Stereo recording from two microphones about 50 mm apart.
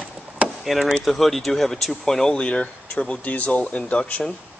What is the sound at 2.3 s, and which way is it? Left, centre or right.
Speech, centre.